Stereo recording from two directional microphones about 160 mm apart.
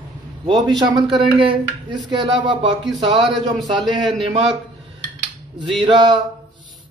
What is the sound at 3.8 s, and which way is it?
Speech, centre (ahead or behind).